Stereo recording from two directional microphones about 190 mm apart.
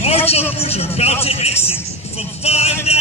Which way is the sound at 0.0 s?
30° left (ahead or behind).